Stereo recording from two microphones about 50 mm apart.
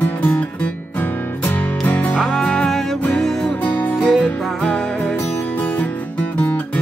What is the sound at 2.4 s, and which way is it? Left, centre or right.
Music, centre.